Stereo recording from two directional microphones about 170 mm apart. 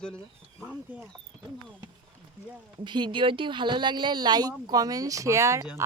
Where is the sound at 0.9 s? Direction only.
10° right (ahead or behind).